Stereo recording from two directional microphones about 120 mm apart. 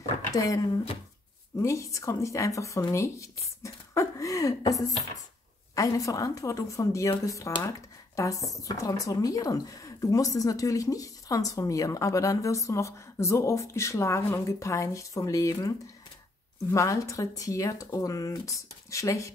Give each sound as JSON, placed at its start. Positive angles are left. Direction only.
{"t": 0.3, "sound": "speech", "side_deg": 30}
{"t": 1.6, "sound": "speech", "side_deg": 25}
{"t": 16.7, "sound": "speech", "side_deg": 25}